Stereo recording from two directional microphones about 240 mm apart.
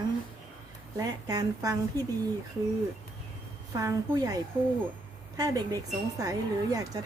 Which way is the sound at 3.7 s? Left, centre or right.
Centre.